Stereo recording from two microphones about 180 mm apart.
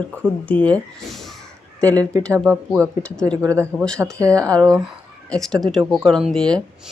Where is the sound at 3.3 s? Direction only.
15° right (ahead or behind).